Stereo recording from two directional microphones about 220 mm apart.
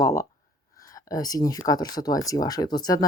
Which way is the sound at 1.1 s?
15° left (ahead or behind).